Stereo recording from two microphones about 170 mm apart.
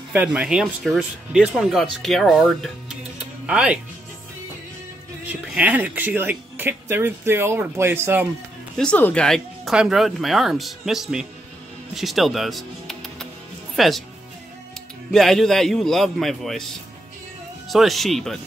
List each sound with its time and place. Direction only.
0.1 s speech: 10° right (ahead or behind)
5.2 s speech: 10° right (ahead or behind)
8.7 s speech: 5° left (ahead or behind)
11.9 s music: centre (ahead or behind)
13.7 s speech: centre (ahead or behind)
15.0 s speech: centre (ahead or behind)
17.6 s speech: centre (ahead or behind)